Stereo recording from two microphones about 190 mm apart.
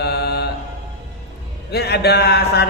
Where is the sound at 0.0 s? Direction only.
60° left (ahead or behind).